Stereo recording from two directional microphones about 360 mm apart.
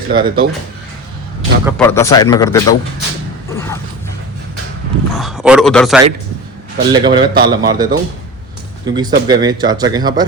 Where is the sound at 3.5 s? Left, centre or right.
Centre.